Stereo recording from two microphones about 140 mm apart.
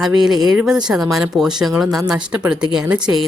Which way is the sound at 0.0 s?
Centre (ahead or behind).